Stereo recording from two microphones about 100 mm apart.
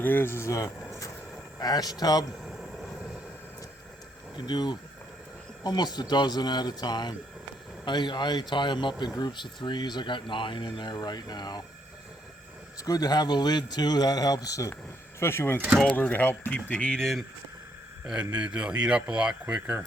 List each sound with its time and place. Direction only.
0.0 s speech: 20° left (ahead or behind)
1.5 s a man's voice: 40° left (ahead or behind)
2.4 s vehicle: centre (ahead or behind)
4.4 s speech: 45° left (ahead or behind)
12.8 s a man's voice: 40° left (ahead or behind)
15.2 s speech: 25° left (ahead or behind); by 17.2 s 5° left (ahead or behind)
18.0 s speech: 10° right (ahead or behind)